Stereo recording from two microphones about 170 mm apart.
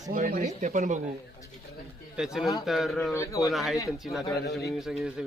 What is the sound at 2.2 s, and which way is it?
Speech, 5° right (ahead or behind).